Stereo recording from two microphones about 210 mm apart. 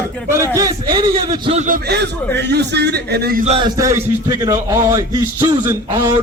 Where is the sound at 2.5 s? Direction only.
50° right (ahead or behind).